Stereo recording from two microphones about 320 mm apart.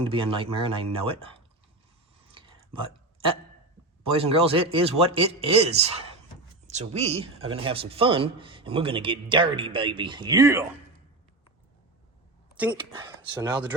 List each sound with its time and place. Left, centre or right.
0.0 s a man's voice: centre
2.2 s whispering: centre
4.1 s a man's voice: centre
12.5 s a man's voice: centre